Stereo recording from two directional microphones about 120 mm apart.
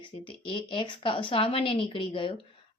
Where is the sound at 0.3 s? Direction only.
45° left (ahead or behind).